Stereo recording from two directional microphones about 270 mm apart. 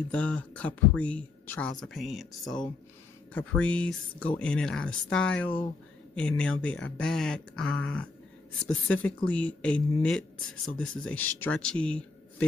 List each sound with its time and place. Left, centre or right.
0.1 s speech: centre